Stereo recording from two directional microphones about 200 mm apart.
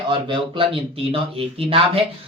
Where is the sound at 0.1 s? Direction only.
25° right (ahead or behind).